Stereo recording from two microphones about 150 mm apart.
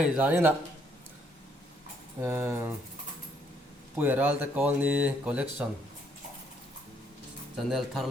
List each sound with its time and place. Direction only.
0.0 s speech: 10° right (ahead or behind)
2.2 s speech: 15° right (ahead or behind)
3.9 s speech: 15° right (ahead or behind)
7.5 s speech: centre (ahead or behind)